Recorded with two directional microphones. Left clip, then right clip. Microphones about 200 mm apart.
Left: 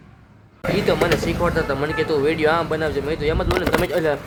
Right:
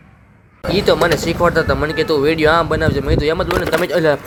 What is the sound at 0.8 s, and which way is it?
Speech, 20° right (ahead or behind).